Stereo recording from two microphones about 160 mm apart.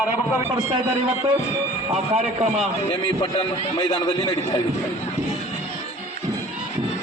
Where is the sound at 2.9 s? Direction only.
35° left (ahead or behind).